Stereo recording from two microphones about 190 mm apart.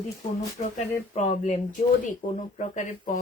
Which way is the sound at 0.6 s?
35° left (ahead or behind).